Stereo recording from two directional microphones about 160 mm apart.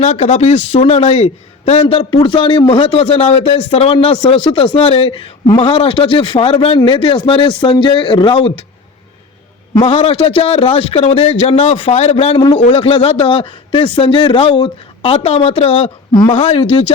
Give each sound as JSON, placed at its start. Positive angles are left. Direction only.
{"t": 0.0, "sound": "speech", "side_deg": 40}
{"t": 9.7, "sound": "speech", "side_deg": 30}